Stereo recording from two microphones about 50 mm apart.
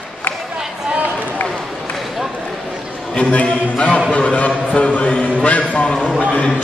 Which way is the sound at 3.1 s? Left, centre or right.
Left.